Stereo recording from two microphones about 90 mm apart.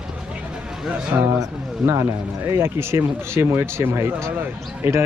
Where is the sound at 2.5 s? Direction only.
30° right (ahead or behind).